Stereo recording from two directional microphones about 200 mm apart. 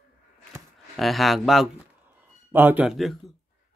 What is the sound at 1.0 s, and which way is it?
A man's voice, centre (ahead or behind).